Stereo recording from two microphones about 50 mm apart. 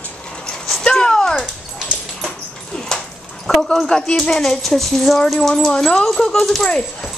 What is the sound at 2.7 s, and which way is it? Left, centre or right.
Dog, centre.